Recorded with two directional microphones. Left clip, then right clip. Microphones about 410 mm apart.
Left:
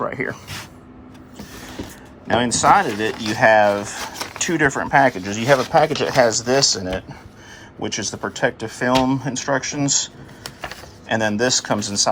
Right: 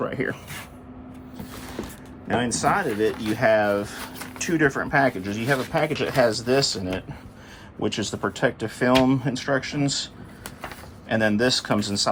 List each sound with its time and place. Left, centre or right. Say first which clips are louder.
2.2 s speech: left 7 dB; centre
10.4 s a sound: left 5 dB; left
11.1 s speech: left 2 dB; centre